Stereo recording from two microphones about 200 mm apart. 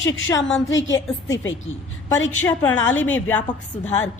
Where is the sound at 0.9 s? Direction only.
15° left (ahead or behind).